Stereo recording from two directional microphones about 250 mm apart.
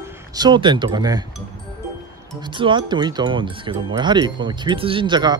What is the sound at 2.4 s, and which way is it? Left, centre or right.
Speech, centre.